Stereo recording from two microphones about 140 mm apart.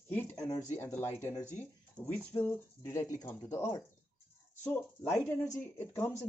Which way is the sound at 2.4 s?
20° left (ahead or behind).